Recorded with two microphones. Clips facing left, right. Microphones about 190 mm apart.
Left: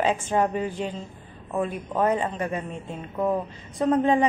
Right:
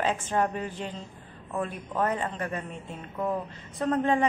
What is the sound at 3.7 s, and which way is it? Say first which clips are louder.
Speech: left 4 dB; 15° left (ahead or behind).